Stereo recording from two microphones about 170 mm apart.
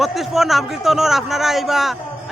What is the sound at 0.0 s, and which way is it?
A man's voice, centre (ahead or behind).